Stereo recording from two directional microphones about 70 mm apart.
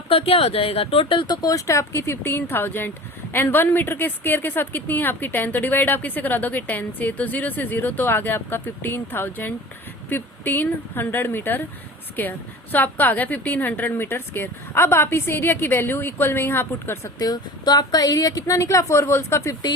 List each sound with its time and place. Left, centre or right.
1.3 s a woman's voice: left
17.2 s speech: left